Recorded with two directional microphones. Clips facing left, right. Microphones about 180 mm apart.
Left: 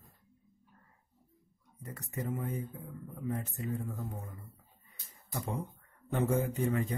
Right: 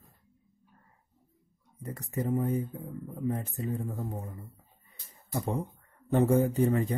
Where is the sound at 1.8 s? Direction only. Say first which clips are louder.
Right 6 dB; 30° right (ahead or behind).